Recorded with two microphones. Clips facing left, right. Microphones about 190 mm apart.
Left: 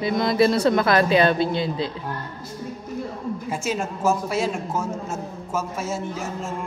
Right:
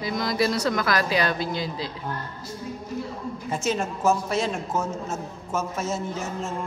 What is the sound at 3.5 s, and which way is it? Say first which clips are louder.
A man's voice: right 2 dB; 10° left (ahead or behind).